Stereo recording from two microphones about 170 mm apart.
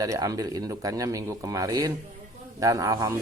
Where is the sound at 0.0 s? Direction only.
20° right (ahead or behind).